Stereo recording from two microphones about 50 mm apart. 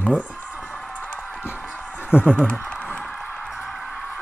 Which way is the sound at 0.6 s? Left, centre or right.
Left.